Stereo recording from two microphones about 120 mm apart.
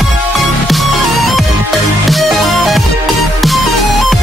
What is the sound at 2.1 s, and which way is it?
Music, centre (ahead or behind).